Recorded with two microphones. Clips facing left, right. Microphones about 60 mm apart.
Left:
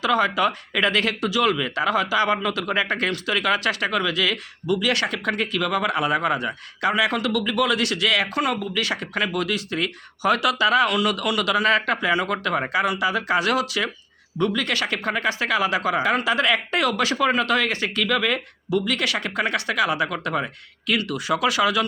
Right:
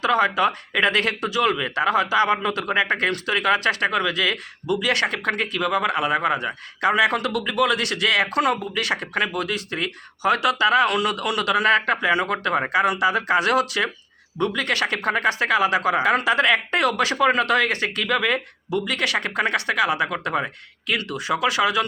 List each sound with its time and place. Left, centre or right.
0.0 s speech: right
8.3 s speech: right
8.5 s speech: right
10.8 s speech: right
12.6 s speech: right